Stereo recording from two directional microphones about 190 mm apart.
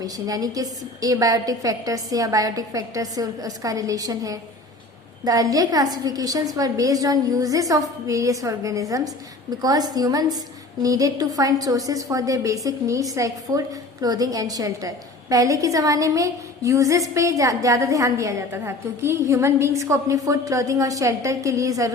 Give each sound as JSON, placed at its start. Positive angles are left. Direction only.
{"t": 0.0, "sound": "a woman's voice", "side_deg": -20}